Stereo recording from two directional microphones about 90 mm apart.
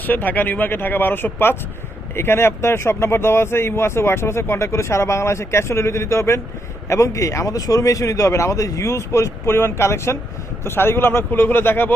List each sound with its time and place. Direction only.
0.0 s speech: 20° left (ahead or behind)